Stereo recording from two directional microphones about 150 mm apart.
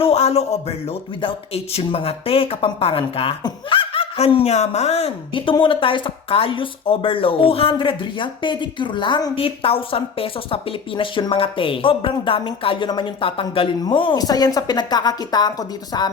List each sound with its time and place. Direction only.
0.0 s speech: 45° left (ahead or behind); by 16.1 s 25° left (ahead or behind)